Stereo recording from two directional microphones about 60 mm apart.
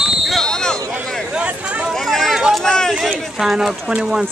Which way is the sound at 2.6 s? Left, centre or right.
Centre.